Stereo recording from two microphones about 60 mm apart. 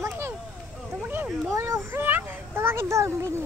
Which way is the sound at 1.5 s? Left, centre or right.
Right.